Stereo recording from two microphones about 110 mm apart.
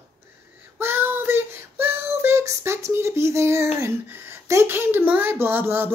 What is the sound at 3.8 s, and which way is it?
Speech, 20° right (ahead or behind).